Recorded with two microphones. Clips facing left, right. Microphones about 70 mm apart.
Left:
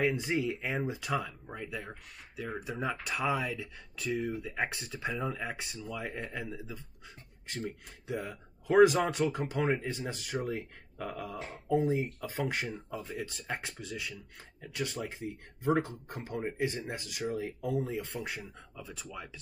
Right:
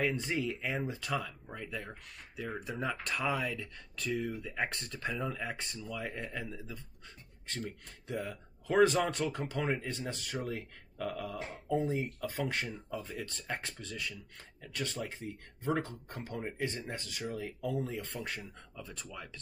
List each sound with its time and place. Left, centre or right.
0.0 s speech: centre
4.6 s speech: centre
8.1 s speech: centre
11.3 s speech: centre
12.2 s speech: centre
12.7 s speech: centre
13.2 s speech: centre